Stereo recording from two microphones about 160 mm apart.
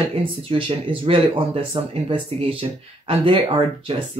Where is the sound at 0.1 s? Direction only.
35° right (ahead or behind).